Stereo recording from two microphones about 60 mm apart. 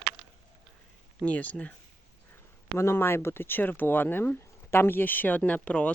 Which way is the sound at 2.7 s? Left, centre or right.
Left.